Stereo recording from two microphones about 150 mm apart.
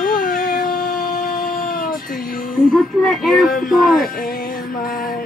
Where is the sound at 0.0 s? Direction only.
70° left (ahead or behind).